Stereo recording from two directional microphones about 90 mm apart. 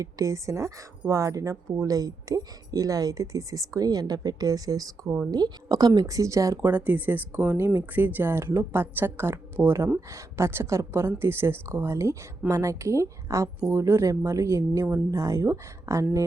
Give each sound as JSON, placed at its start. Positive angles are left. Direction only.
{"t": 0.0, "sound": "speech", "side_deg": -40}
{"t": 6.6, "sound": "speech", "side_deg": -20}